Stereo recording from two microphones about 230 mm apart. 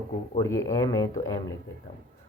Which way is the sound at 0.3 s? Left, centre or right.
Centre.